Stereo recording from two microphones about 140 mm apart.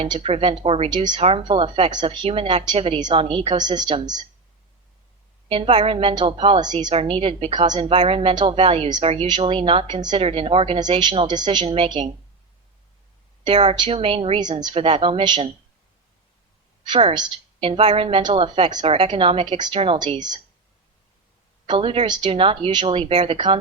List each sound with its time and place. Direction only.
0.0 s a woman's voice: 45° right (ahead or behind)
0.9 s a woman's voice: 30° right (ahead or behind)
1.2 s a woman's voice: 40° right (ahead or behind)
5.5 s a woman's voice: 40° right (ahead or behind)
6.9 s a woman's voice: 40° right (ahead or behind)
10.2 s a woman's voice: 45° right (ahead or behind)
13.4 s a woman's voice: 45° right (ahead or behind)
16.9 s a woman's voice: 45° right (ahead or behind)
21.7 s a woman's voice: 40° right (ahead or behind)